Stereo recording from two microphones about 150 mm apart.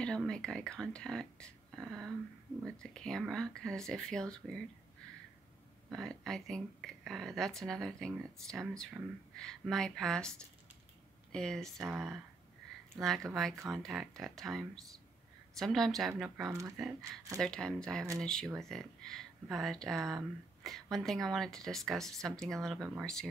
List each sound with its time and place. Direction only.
0.0 s speech: 5° left (ahead or behind)
5.9 s speech: centre (ahead or behind)
11.3 s speech: 5° left (ahead or behind)
12.9 s speech: centre (ahead or behind)